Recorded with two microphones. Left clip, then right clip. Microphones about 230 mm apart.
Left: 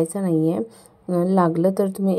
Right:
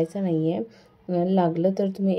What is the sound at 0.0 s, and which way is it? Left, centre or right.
A woman's voice, left.